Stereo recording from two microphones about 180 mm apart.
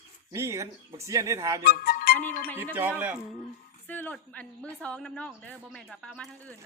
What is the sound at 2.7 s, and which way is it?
Speech, 10° right (ahead or behind).